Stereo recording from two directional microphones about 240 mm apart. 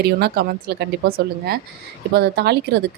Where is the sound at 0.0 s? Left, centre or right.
Right.